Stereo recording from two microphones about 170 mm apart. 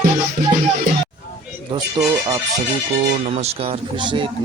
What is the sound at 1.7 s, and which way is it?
Speech, 30° right (ahead or behind).